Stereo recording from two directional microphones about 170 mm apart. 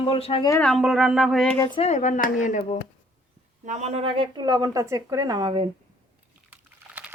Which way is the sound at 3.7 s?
40° right (ahead or behind).